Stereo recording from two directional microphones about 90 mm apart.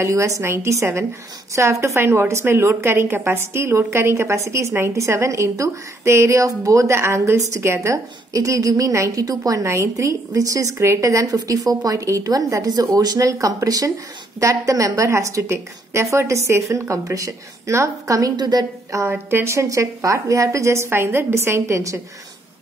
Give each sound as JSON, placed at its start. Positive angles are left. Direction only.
{"t": 0.0, "sound": "a woman's voice", "side_deg": -35}
{"t": 18.3, "sound": "a woman's voice", "side_deg": -50}
{"t": 19.0, "sound": "a woman's voice", "side_deg": -30}